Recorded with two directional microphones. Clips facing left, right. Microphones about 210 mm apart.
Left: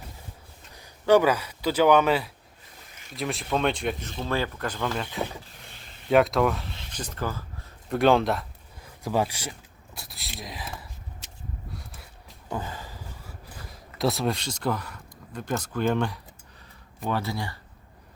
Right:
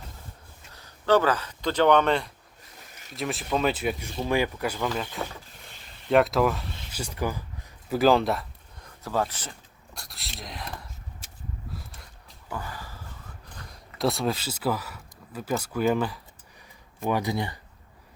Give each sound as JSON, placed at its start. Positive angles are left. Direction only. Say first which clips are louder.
{"t": 0.7, "sound": "speech", "louder": "left 2 dB", "side_deg": 15}
{"t": 7.9, "sound": "a sound", "louder": "even", "side_deg": 0}
{"t": 9.0, "sound": "speech", "louder": "left 2 dB", "side_deg": 10}
{"t": 11.7, "sound": "a sound", "louder": "even", "side_deg": 0}
{"t": 12.5, "sound": "gasp", "louder": "left 3 dB", "side_deg": 20}
{"t": 17.1, "sound": "speech", "louder": "right 3 dB", "side_deg": -15}